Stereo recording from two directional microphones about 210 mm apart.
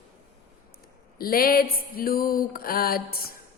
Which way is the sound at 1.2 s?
45° left (ahead or behind).